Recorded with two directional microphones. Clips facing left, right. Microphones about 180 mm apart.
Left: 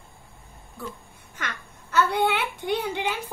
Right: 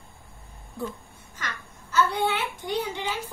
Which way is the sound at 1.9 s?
60° left (ahead or behind).